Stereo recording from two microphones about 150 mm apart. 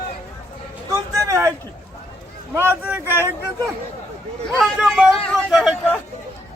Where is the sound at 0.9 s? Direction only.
20° right (ahead or behind).